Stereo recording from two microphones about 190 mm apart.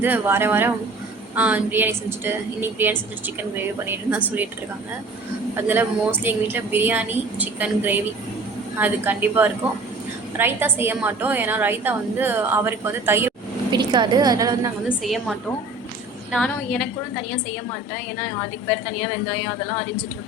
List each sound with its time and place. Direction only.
0.0 s a woman's voice: 10° right (ahead or behind)
5.5 s a woman's voice: 10° right (ahead or behind)
13.7 s a woman's voice: 25° right (ahead or behind)
14.8 s a woman's voice: centre (ahead or behind)